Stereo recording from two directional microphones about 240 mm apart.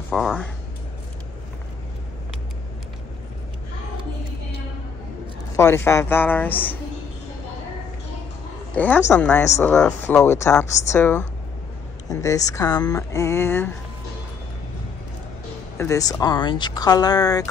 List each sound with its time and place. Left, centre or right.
0.1 s speech: centre
5.6 s speech: centre
8.7 s speech: centre
15.8 s speech: centre